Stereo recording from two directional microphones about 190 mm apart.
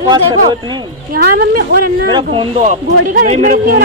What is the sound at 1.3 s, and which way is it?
Speech, 50° right (ahead or behind).